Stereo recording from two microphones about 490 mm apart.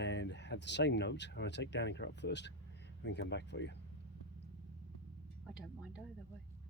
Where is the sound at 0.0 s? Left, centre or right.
Left.